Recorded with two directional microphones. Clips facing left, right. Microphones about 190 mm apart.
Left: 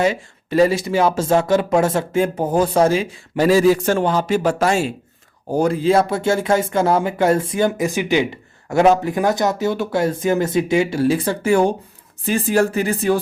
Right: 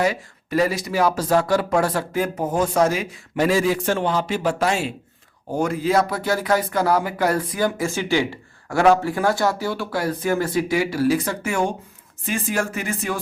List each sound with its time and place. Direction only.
0.0 s speech: 25° left (ahead or behind); by 4.9 s 45° left (ahead or behind)
5.5 s speech: 35° left (ahead or behind)